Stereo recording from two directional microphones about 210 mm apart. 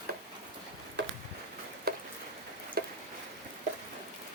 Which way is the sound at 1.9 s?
45° right (ahead or behind).